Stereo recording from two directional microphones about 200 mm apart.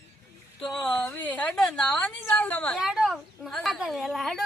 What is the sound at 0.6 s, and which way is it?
A woman's voice, centre (ahead or behind).